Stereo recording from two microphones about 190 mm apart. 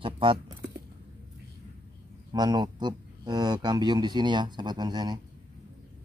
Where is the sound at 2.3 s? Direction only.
20° right (ahead or behind).